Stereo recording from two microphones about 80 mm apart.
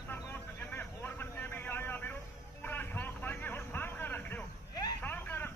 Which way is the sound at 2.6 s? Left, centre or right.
Left.